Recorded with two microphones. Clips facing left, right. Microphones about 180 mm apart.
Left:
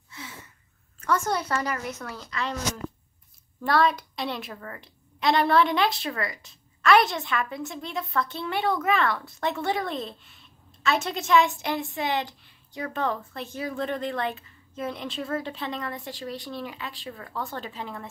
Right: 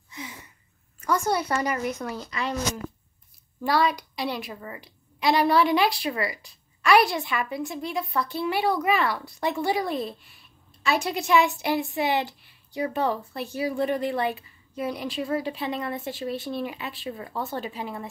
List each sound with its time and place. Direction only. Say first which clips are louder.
0.1 s a sound: right 3 dB; 15° right (ahead or behind)
1.0 s a woman's voice: right 2 dB; 10° right (ahead or behind)
3.6 s a woman's voice: even; centre (ahead or behind)